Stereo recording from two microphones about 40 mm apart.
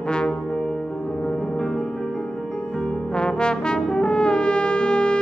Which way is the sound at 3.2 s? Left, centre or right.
Left.